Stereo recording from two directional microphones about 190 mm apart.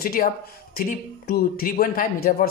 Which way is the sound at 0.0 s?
50° left (ahead or behind).